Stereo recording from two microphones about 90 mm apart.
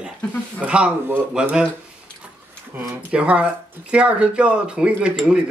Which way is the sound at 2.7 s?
15° right (ahead or behind).